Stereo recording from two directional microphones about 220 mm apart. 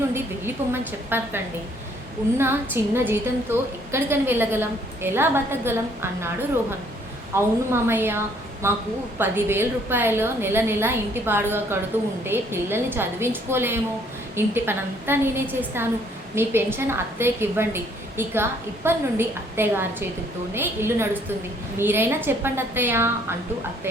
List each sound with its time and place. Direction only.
0.1 s a woman's voice: 10° right (ahead or behind)
2.4 s a woman's voice: 10° right (ahead or behind)